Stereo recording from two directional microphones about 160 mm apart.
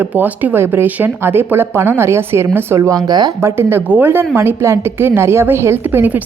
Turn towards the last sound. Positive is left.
turn(degrees=-10)  # may be behind; listen again after turning